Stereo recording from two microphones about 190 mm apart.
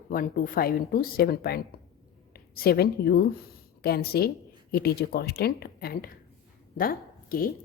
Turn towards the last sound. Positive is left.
turn(degrees=50)  # may be behind; listen again after turning